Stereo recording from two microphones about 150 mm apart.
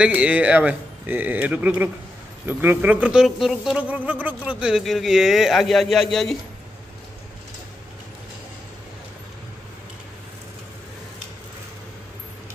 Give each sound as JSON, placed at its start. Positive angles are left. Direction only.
{"t": 0.0, "sound": "speech", "side_deg": -10}